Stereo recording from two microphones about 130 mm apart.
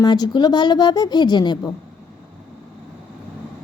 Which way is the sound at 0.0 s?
35° left (ahead or behind).